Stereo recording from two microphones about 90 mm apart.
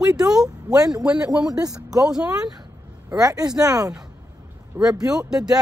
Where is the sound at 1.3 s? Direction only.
5° right (ahead or behind).